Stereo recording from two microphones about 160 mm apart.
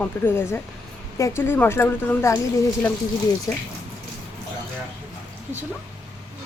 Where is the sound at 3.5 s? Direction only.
20° left (ahead or behind).